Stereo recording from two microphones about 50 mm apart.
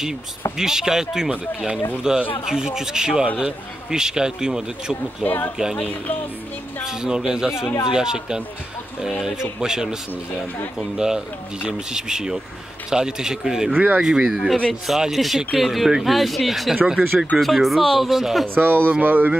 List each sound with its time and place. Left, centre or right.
0.6 s a man's voice: centre
5.2 s speech: left
5.6 s a man's voice: centre
11.0 s a man's voice: centre
13.7 s speech: right
14.0 s a man's voice: centre
16.9 s a man's voice: centre
17.4 s speech: centre
18.5 s speech: right